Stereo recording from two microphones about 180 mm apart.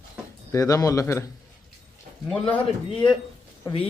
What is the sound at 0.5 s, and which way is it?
Speech, 20° left (ahead or behind).